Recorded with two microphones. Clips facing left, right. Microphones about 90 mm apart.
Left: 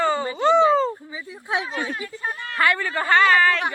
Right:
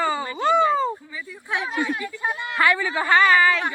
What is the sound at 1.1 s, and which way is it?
Speech, 20° left (ahead or behind).